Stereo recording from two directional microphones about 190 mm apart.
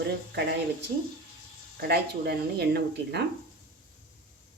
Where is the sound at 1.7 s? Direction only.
55° right (ahead or behind).